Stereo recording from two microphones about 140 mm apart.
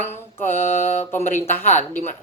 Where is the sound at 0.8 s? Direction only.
15° left (ahead or behind).